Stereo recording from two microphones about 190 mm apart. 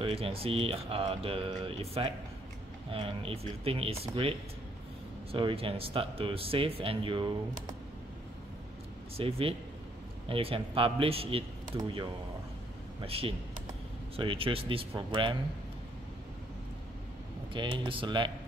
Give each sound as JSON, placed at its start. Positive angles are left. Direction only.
{"t": 0.0, "sound": "speech", "side_deg": -30}
{"t": 9.1, "sound": "speech", "side_deg": -30}
{"t": 13.0, "sound": "speech", "side_deg": -30}
{"t": 17.5, "sound": "speech", "side_deg": -25}